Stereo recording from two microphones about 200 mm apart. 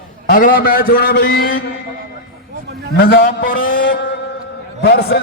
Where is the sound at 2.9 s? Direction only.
50° left (ahead or behind).